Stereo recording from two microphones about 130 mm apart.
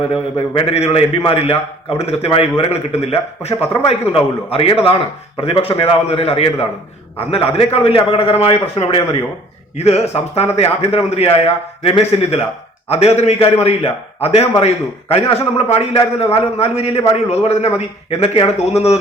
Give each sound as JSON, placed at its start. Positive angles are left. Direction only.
{"t": 0.1, "sound": "a man's voice", "side_deg": 45}